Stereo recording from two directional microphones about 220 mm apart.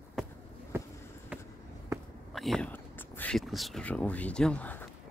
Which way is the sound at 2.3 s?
Centre (ahead or behind).